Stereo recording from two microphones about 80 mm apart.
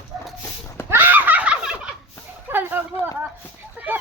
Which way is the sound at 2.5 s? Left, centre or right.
Right.